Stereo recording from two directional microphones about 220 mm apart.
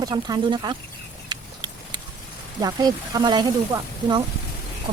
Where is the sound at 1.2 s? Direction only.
20° right (ahead or behind).